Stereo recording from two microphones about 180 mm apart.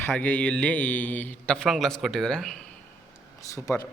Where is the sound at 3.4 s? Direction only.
15° left (ahead or behind).